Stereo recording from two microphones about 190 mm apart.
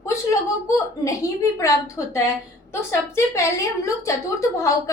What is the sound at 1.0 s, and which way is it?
A woman's voice, 15° left (ahead or behind).